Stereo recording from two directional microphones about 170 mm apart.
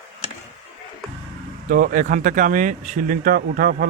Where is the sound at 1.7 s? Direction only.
55° right (ahead or behind).